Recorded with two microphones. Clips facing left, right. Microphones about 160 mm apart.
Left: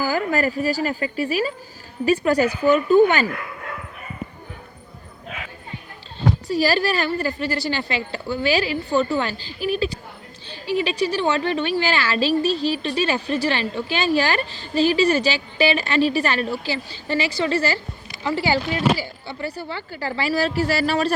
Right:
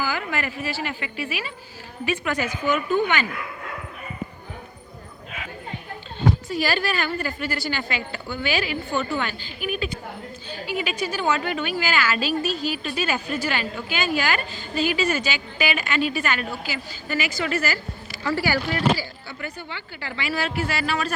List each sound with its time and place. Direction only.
0.0 s a woman's voice: 40° left (ahead or behind)
6.5 s a woman's voice: 35° left (ahead or behind)